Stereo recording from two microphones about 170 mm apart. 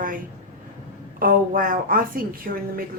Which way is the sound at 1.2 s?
55° right (ahead or behind).